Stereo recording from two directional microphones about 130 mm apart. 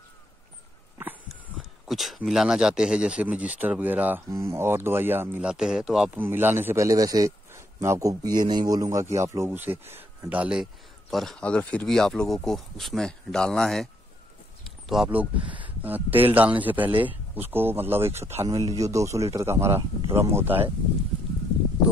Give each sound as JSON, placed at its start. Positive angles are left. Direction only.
{"t": 1.0, "sound": "a sound", "side_deg": -15}
{"t": 1.3, "sound": "speech", "side_deg": 0}
{"t": 14.6, "sound": "a sound", "side_deg": 0}
{"t": 15.0, "sound": "a man's voice", "side_deg": -10}
{"t": 15.4, "sound": "speech", "side_deg": -40}
{"t": 15.8, "sound": "a man's voice", "side_deg": -15}